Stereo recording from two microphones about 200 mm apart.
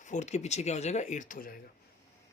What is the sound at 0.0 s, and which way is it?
Speech, 35° left (ahead or behind).